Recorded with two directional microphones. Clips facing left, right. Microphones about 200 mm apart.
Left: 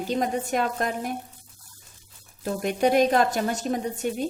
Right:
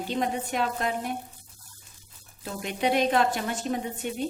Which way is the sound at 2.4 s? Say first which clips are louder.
Left 5 dB; 45° left (ahead or behind).